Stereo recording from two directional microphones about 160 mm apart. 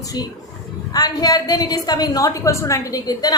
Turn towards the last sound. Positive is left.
turn(degrees=20)  # may be behind; listen again after turning